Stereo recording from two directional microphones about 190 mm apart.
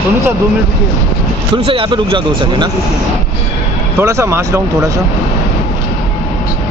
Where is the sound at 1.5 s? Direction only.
25° right (ahead or behind).